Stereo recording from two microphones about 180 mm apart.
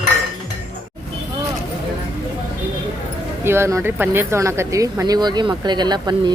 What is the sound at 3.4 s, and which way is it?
Speech, 15° right (ahead or behind).